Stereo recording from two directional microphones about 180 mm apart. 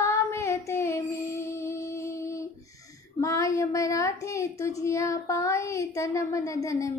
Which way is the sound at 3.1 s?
15° left (ahead or behind).